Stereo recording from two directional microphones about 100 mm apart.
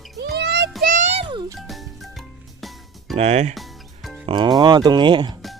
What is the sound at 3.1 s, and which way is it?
Speech, 90° right.